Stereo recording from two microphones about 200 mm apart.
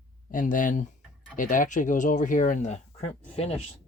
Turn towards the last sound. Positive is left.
turn(degrees=30)  # may be behind; listen again after turning